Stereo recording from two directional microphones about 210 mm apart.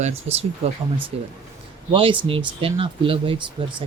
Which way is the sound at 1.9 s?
25° right (ahead or behind).